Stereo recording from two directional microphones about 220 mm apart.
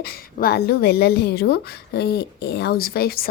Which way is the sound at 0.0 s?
45° left (ahead or behind).